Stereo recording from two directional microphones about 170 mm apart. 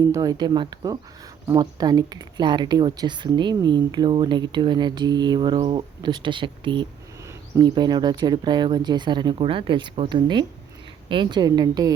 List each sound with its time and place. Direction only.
0.1 s speech: 20° right (ahead or behind)